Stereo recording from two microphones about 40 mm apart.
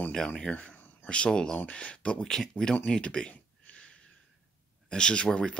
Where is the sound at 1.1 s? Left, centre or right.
Left.